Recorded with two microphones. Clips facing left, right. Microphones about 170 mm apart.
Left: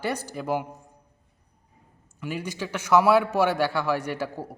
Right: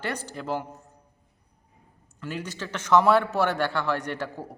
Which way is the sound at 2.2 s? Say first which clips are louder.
Left 2 dB; 10° left (ahead or behind).